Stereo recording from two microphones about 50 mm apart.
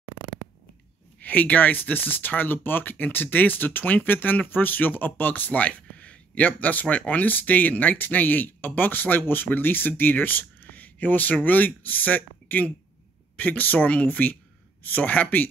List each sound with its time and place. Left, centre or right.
1.2 s speech: left